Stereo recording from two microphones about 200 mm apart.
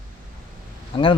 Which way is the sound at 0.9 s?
25° left (ahead or behind).